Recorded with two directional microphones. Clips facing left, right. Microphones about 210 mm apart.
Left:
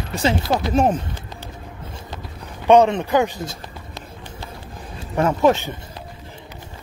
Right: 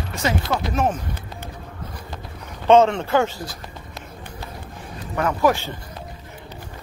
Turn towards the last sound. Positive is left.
turn(degrees=25)  # may be behind; listen again after turning